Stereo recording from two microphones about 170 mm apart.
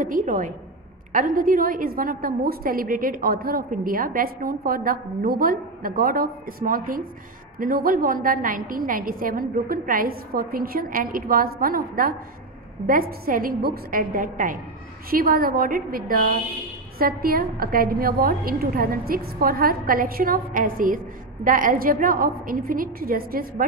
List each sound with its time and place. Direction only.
0.0 s a woman's voice: 50° right (ahead or behind)